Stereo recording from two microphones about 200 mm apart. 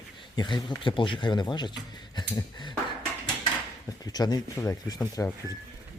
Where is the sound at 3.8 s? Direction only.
20° left (ahead or behind).